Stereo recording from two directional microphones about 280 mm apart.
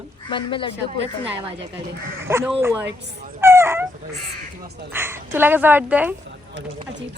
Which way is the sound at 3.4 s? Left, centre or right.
Centre.